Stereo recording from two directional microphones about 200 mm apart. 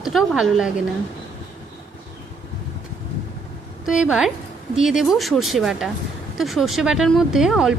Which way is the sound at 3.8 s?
5° right (ahead or behind).